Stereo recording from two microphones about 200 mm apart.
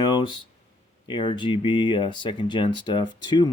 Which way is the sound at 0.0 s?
20° left (ahead or behind).